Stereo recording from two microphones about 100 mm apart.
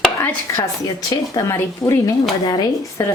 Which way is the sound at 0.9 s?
40° left (ahead or behind).